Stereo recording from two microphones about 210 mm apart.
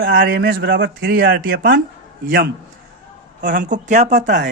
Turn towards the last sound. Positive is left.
turn(degrees=-35)  # may be behind; listen again after turning